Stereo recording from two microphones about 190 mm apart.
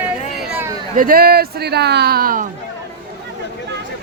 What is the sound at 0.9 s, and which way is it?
Speech, 45° right (ahead or behind).